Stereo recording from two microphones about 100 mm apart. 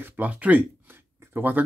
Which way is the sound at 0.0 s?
15° right (ahead or behind).